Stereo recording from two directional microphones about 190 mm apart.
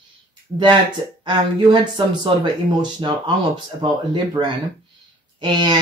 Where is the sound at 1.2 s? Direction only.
25° right (ahead or behind).